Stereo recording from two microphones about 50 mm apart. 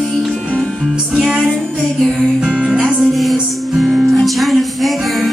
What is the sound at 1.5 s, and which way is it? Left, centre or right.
Child singing, centre.